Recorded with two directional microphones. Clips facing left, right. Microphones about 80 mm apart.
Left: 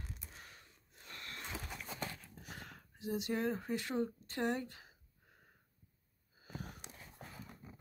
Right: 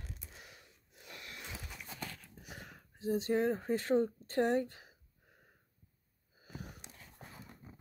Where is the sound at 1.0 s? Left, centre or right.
Centre.